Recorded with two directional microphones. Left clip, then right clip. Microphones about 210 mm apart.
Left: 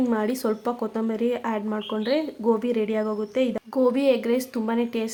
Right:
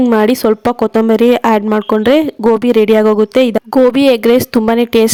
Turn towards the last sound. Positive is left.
turn(degrees=-50)  # may be behind; listen again after turning